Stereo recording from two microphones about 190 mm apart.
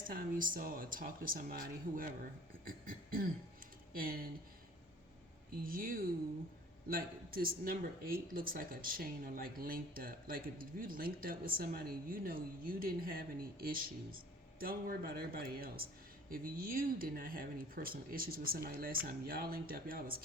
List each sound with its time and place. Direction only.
0.1 s speech: 45° right (ahead or behind)
2.6 s a sound: 50° right (ahead or behind)
3.9 s speech: 50° right (ahead or behind)
5.6 s speech: 50° right (ahead or behind)